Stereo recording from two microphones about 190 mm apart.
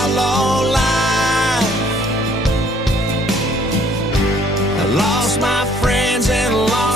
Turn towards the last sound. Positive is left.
turn(degrees=0)  # may be behind; listen again after turning